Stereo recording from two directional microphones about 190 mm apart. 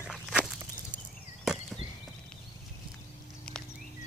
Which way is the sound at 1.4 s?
Centre (ahead or behind).